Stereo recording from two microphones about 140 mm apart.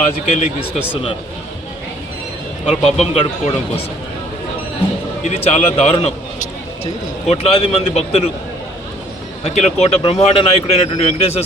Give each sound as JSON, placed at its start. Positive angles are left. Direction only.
{"t": 0.3, "sound": "a man's voice", "side_deg": 50}
{"t": 2.8, "sound": "a man's voice", "side_deg": 45}
{"t": 5.2, "sound": "a man's voice", "side_deg": 50}
{"t": 9.4, "sound": "a man's voice", "side_deg": 50}